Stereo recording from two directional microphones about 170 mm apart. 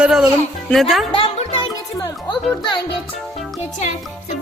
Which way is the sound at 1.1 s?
30° left (ahead or behind).